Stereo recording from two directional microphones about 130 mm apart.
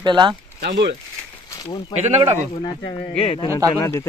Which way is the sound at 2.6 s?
30° left (ahead or behind).